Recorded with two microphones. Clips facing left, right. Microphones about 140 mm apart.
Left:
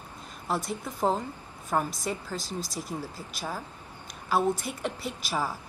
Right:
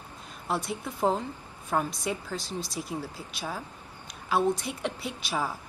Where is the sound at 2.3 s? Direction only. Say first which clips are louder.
Even; 45° left (ahead or behind).